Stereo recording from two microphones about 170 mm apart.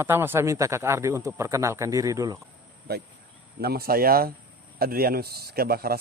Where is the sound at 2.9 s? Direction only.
65° right (ahead or behind).